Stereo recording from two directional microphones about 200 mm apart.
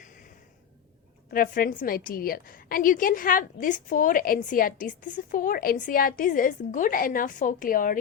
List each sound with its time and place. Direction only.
1.3 s a woman's voice: 45° left (ahead or behind)